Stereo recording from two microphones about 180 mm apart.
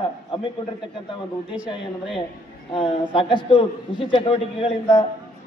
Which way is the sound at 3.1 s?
30° left (ahead or behind).